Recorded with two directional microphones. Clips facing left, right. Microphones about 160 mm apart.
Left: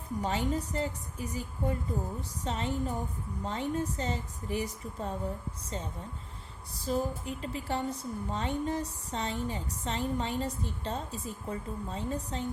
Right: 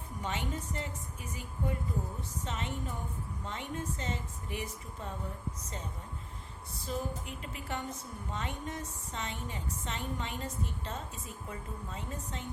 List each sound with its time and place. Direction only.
0.2 s a woman's voice: 35° left (ahead or behind)
6.7 s a woman's voice: 35° left (ahead or behind)